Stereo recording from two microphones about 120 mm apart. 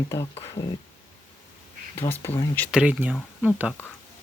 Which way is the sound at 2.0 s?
20° left (ahead or behind).